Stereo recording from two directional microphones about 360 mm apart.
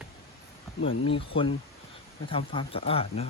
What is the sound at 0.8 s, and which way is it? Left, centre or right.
Speech, centre.